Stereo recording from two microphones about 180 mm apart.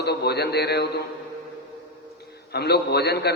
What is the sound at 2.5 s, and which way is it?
Speech, 65° left (ahead or behind).